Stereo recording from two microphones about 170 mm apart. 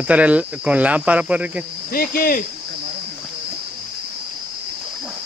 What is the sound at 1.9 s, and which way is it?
Speech, 60° left (ahead or behind).